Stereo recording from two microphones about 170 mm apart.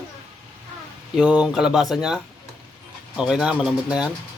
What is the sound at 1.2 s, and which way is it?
Speech, 5° right (ahead or behind).